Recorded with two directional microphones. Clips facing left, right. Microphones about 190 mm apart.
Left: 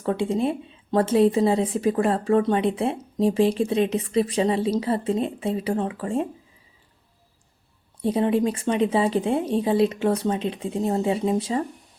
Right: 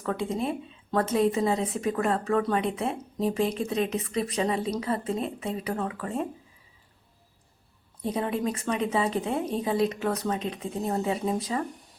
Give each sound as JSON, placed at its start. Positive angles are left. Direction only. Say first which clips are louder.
{"t": 0.0, "sound": "a woman's voice", "louder": "left 6 dB", "side_deg": 30}
{"t": 8.1, "sound": "a woman's voice", "louder": "left 7 dB", "side_deg": 30}